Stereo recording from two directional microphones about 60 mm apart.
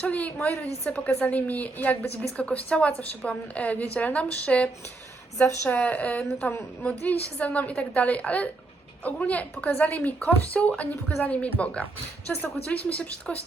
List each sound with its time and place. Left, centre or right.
0.0 s a woman's voice: left